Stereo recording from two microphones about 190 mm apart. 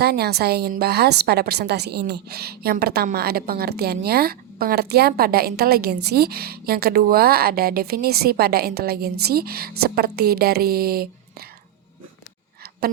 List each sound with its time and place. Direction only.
0.0 s a woman's voice: 55° right (ahead or behind)